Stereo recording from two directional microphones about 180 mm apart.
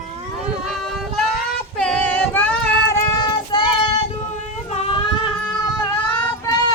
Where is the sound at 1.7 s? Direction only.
5° left (ahead or behind).